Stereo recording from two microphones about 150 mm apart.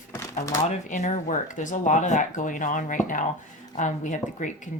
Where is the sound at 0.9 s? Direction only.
55° left (ahead or behind).